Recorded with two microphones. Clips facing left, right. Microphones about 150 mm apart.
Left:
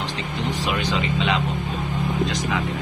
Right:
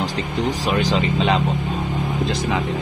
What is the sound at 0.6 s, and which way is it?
Speech, 35° right (ahead or behind).